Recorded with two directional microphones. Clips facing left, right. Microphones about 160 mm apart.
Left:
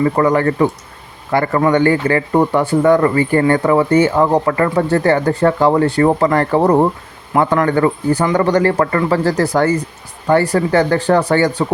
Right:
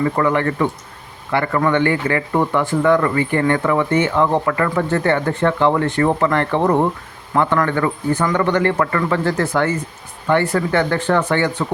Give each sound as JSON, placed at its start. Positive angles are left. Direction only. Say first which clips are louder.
{"t": 0.0, "sound": "speech", "louder": "left 4 dB", "side_deg": 35}